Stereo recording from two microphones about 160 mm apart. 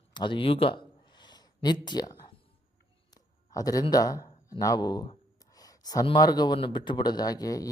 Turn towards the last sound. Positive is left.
turn(degrees=20)  # may be behind; listen again after turning